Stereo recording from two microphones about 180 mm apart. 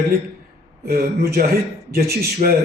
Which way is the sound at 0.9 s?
55° right (ahead or behind).